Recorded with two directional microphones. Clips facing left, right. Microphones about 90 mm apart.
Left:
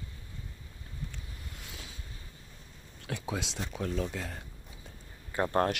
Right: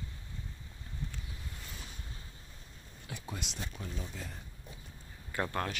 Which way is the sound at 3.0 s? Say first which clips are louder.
Left 7 dB; 90° left.